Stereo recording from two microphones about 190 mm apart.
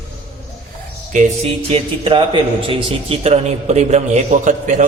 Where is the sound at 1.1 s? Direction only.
35° right (ahead or behind).